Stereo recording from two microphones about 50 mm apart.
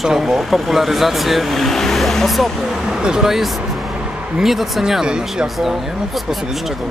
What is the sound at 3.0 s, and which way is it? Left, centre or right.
Speech, centre.